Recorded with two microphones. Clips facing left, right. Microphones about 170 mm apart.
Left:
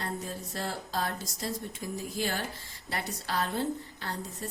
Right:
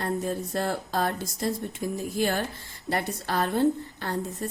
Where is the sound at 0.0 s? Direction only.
55° right (ahead or behind).